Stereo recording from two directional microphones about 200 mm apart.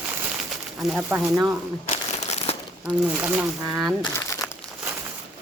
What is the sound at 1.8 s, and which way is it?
Crumpling, 35° left (ahead or behind).